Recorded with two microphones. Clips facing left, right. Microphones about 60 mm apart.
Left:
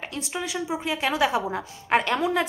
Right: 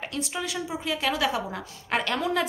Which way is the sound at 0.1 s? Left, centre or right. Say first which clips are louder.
Left 1 dB; centre.